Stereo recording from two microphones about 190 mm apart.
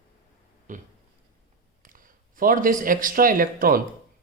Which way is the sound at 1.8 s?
45° right (ahead or behind).